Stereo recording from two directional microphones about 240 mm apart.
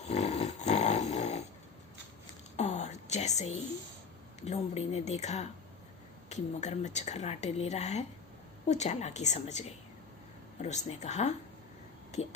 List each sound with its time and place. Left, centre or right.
0.0 s dog: left
2.6 s whispering: left
4.4 s a woman's voice: left